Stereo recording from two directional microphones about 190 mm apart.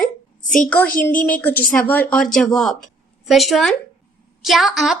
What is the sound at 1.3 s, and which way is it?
A woman's voice, 10° left (ahead or behind).